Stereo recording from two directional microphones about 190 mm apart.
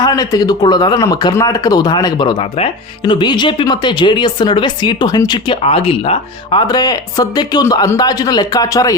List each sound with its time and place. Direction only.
0.0 s speech: 20° left (ahead or behind)